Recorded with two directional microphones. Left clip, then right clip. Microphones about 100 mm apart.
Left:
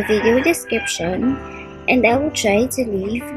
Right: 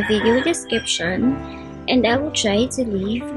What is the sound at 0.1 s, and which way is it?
A woman's voice, 15° left (ahead or behind).